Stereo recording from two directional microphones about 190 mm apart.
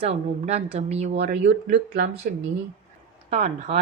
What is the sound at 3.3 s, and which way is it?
Speech, 35° right (ahead or behind).